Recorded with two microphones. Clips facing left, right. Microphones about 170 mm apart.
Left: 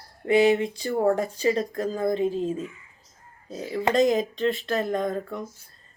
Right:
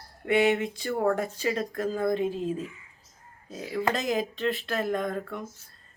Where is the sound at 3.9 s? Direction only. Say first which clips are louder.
Left 8 dB; 5° right (ahead or behind).